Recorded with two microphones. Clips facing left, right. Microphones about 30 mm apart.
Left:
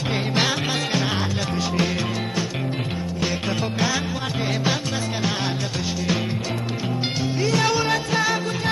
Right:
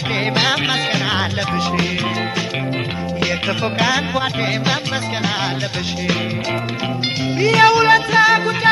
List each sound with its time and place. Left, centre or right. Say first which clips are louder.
0.4 s music: right 5 dB; right
7.3 s music: right 10 dB; right